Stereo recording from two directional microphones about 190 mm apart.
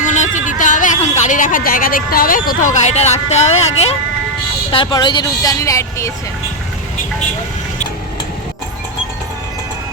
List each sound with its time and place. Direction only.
0.0 s speech: 40° left (ahead or behind); by 6.1 s 15° left (ahead or behind)